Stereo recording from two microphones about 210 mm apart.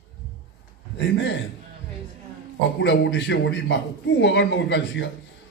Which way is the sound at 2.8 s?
55° left (ahead or behind).